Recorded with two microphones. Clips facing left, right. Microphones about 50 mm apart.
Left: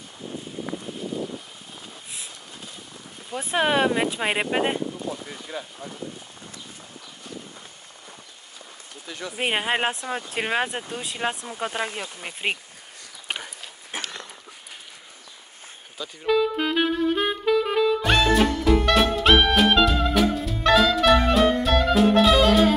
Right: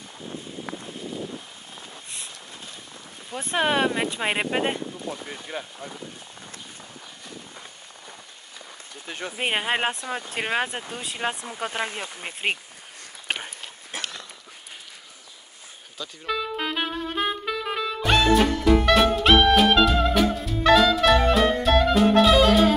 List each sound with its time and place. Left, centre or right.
3.3 s speech: centre
5.1 s speech: right
9.0 s speech: right
9.4 s speech: centre
12.0 s speech: centre
13.9 s a sound: left
16.0 s saxophone: centre